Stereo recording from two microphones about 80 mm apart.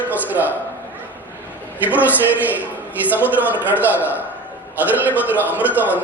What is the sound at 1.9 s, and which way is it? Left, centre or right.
A man's voice, right.